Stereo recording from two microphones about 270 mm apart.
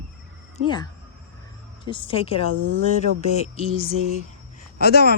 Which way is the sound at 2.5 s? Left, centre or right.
Right.